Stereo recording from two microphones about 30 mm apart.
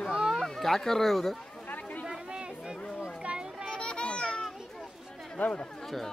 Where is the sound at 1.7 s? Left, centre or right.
Left.